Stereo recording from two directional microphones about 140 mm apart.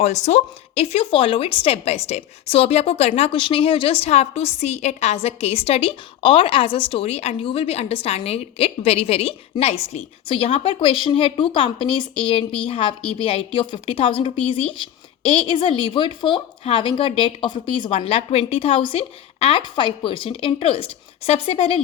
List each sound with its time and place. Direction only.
0.0 s speech: 55° left (ahead or behind)